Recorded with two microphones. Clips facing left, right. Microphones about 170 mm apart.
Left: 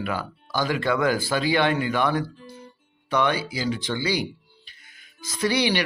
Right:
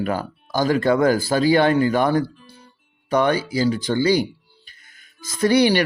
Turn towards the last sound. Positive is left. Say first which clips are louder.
# right 7 dB
turn(degrees=-50)  # may be behind; listen again after turning